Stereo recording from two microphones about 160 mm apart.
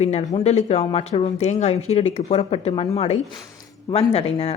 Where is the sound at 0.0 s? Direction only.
45° left (ahead or behind).